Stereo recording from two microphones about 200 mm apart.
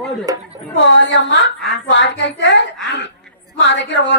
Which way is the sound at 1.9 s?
65° left (ahead or behind).